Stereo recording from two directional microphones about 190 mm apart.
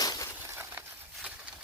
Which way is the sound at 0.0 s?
20° left (ahead or behind).